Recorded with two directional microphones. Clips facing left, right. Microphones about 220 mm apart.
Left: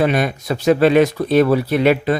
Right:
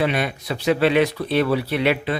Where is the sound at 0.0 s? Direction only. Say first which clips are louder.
Left 5 dB; 45° left (ahead or behind).